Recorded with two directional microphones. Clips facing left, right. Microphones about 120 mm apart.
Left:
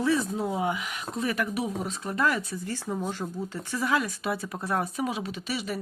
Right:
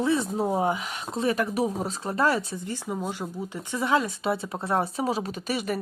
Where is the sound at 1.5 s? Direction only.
40° right (ahead or behind).